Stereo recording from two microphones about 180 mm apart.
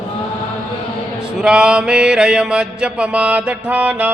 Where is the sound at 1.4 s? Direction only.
5° right (ahead or behind).